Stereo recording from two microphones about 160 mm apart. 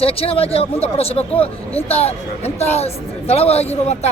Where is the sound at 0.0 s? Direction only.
35° left (ahead or behind).